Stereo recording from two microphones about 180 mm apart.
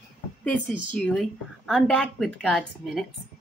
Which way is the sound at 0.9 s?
5° left (ahead or behind).